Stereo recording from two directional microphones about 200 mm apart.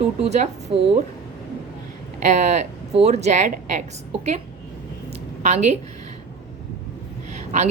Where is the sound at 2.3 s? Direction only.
35° right (ahead or behind).